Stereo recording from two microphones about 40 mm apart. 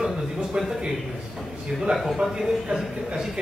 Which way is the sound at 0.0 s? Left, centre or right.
Centre.